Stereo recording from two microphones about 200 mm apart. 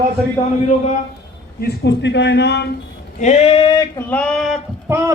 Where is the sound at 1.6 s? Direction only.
60° left (ahead or behind).